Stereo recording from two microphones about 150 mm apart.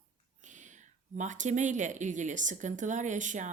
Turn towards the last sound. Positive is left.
turn(degrees=-55)  # may be behind; listen again after turning